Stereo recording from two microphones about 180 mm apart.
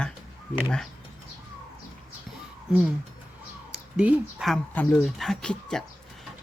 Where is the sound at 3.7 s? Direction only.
5° right (ahead or behind).